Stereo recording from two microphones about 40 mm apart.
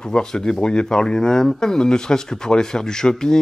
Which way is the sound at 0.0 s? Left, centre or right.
Centre.